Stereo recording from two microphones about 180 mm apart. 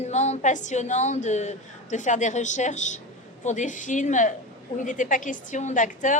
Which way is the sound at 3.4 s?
45° left (ahead or behind).